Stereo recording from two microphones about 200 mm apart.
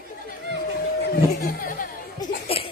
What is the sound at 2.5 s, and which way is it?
Laughter, 25° left (ahead or behind).